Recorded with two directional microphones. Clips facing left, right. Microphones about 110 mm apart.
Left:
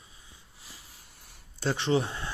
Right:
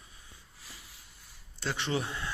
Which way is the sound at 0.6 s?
25° left (ahead or behind).